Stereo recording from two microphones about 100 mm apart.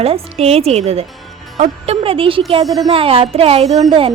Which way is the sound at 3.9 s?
60° right (ahead or behind).